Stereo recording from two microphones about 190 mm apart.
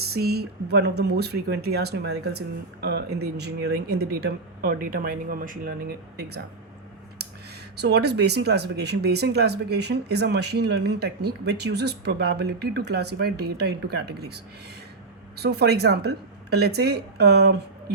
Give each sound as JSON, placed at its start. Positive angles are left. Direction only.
{"t": 0.1, "sound": "speech", "side_deg": -55}
{"t": 6.1, "sound": "speech", "side_deg": -60}
{"t": 7.8, "sound": "speech", "side_deg": -60}
{"t": 15.4, "sound": "speech", "side_deg": -60}